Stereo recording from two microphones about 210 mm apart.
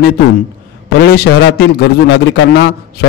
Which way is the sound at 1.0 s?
50° left (ahead or behind).